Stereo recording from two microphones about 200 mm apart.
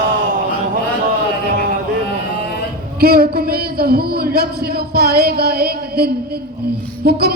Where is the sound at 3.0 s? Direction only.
50° right (ahead or behind).